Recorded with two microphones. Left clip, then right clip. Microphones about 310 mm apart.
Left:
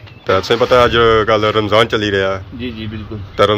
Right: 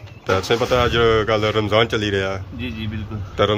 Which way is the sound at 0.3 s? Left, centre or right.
Centre.